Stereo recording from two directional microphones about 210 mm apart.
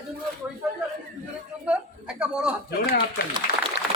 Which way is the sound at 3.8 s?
50° left (ahead or behind).